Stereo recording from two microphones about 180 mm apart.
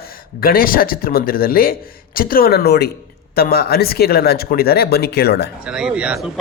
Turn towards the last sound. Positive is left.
turn(degrees=-5)  # may be behind; listen again after turning